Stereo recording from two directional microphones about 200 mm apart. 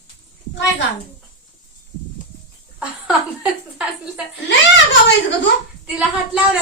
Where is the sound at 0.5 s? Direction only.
60° left (ahead or behind).